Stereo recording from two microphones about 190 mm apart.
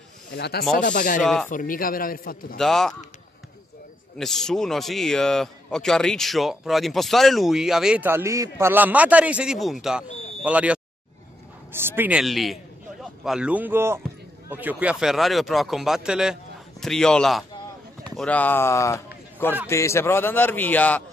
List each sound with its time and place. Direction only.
0.3 s speech: 60° left (ahead or behind)
0.8 s speech: 45° left (ahead or behind)
1.2 s a man's voice: centre (ahead or behind)
1.5 s speech: 45° left (ahead or behind)
2.5 s a man's voice: centre (ahead or behind)
4.2 s a man's voice: centre (ahead or behind)